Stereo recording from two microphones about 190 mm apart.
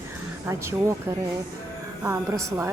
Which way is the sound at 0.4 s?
15° right (ahead or behind).